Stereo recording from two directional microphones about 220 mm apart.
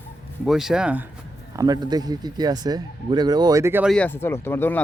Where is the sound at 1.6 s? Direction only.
15° right (ahead or behind).